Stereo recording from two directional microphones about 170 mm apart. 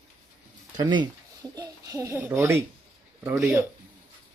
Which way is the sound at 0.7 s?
25° right (ahead or behind).